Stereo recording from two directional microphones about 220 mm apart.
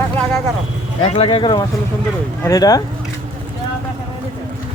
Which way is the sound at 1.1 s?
25° left (ahead or behind).